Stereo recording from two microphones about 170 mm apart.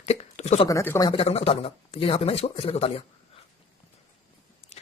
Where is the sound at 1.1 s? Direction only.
35° left (ahead or behind).